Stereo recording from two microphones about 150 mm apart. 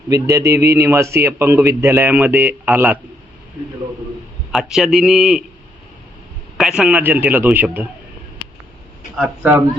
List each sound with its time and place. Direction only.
0.1 s a man's voice: 20° right (ahead or behind)
4.5 s a man's voice: 5° right (ahead or behind)
6.6 s speech: 5° right (ahead or behind)
9.1 s speech: 5° right (ahead or behind)